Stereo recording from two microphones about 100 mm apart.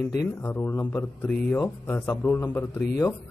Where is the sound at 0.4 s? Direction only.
20° left (ahead or behind).